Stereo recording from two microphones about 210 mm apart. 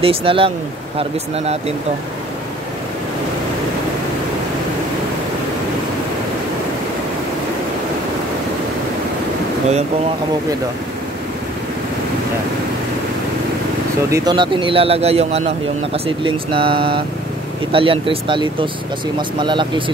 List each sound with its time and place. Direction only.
0.0 s speech: 25° right (ahead or behind)
14.1 s speech: 20° right (ahead or behind)